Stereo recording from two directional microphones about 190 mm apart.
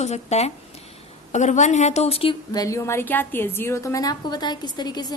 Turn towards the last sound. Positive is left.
turn(degrees=20)  # may be behind; listen again after turning